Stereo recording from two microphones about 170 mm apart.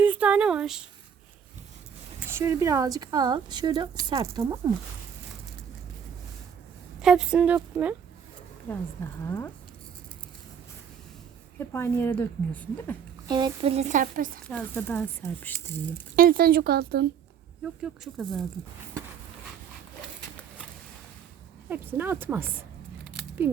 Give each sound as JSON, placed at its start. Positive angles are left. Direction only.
{"t": 0.0, "sound": "speech", "side_deg": -10}
{"t": 2.3, "sound": "speech", "side_deg": -20}
{"t": 7.0, "sound": "speech", "side_deg": -5}
{"t": 8.7, "sound": "a woman's voice", "side_deg": 10}
{"t": 11.6, "sound": "a woman's voice", "side_deg": 15}
{"t": 13.2, "sound": "speech", "side_deg": -25}
{"t": 14.4, "sound": "a woman's voice", "side_deg": 10}
{"t": 16.1, "sound": "speech", "side_deg": -60}
{"t": 17.8, "sound": "speech", "side_deg": 0}
{"t": 21.7, "sound": "speech", "side_deg": -10}